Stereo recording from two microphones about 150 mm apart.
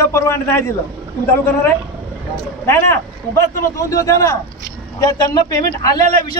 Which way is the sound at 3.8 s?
20° left (ahead or behind).